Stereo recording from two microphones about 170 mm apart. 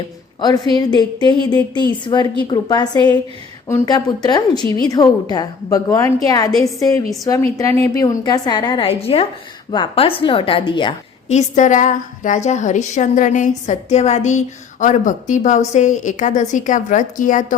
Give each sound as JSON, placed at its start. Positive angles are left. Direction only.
{"t": 0.3, "sound": "a woman's voice", "side_deg": 25}
{"t": 11.3, "sound": "a woman's voice", "side_deg": 45}